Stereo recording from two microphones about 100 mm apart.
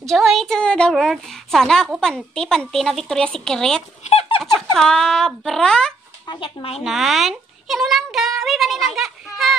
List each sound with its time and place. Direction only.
0.0 s speech: centre (ahead or behind)
4.1 s squeak: 90° left
4.7 s speech: 5° left (ahead or behind)
6.2 s speech: 50° left (ahead or behind)
6.8 s speech: centre (ahead or behind)